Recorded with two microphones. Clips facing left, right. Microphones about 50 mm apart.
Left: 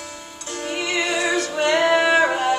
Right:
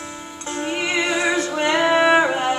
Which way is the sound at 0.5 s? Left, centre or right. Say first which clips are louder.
Right 2 dB; right.